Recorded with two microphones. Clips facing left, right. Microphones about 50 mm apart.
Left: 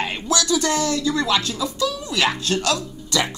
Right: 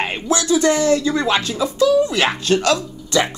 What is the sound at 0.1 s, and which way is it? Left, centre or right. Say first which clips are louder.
Speech: right 3 dB; right.